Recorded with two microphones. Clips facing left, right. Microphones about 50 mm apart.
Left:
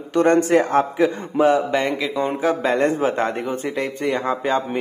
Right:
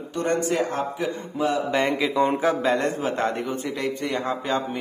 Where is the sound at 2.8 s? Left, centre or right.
Left.